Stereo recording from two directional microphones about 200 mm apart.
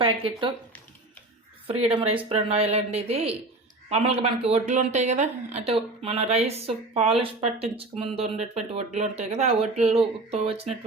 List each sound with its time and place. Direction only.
0.0 s speech: 25° right (ahead or behind)
1.6 s speech: 30° right (ahead or behind)